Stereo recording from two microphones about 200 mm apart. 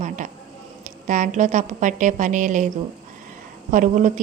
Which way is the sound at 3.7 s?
40° right (ahead or behind).